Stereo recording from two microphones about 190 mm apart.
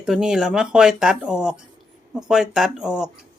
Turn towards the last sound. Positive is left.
turn(degrees=-5)  # may be behind; listen again after turning